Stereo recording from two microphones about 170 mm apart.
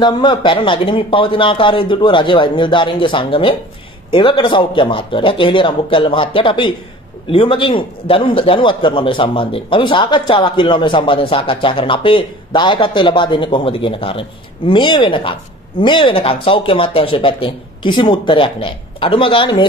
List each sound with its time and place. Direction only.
0.0 s a man's voice: 25° left (ahead or behind)